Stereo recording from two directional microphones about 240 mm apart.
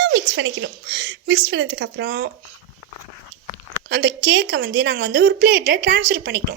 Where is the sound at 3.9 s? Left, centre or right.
Right.